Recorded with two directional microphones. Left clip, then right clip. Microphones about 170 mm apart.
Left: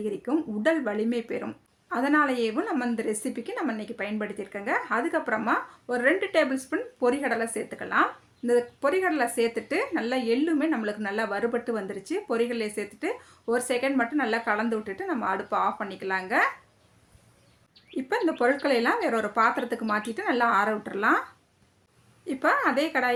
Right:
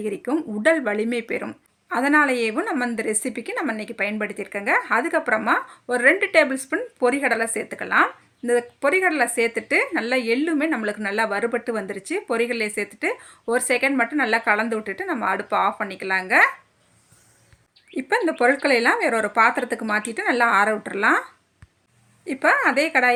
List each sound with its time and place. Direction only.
0.0 s speech: 30° right (ahead or behind)
17.9 s speech: 30° right (ahead or behind)
22.3 s speech: 25° right (ahead or behind)